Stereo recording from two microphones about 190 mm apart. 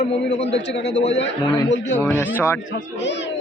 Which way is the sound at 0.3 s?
65° left (ahead or behind).